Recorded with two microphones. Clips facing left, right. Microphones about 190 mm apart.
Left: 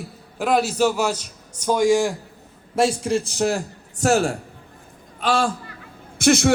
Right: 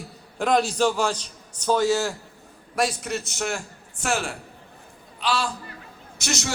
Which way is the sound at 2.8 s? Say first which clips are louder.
Left 6 dB; 30° left (ahead or behind).